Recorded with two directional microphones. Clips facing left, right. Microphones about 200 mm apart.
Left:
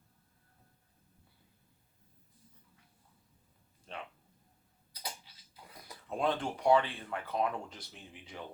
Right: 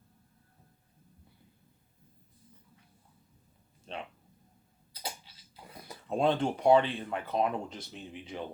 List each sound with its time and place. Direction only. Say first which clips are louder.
3.9 s a sound: right 4 dB; 25° right (ahead or behind)
4.9 s tick-tock: right 4 dB; 25° right (ahead or behind)
5.7 s speech: right 6 dB; 25° right (ahead or behind)